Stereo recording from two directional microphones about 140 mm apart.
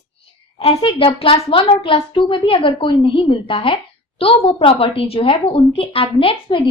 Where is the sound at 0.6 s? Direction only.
40° left (ahead or behind).